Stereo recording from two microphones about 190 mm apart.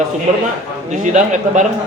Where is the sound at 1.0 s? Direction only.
40° right (ahead or behind).